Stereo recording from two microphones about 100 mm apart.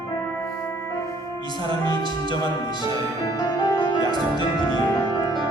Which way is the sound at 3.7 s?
45° left (ahead or behind).